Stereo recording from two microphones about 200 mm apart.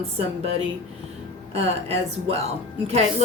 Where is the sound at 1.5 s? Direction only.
30° right (ahead or behind).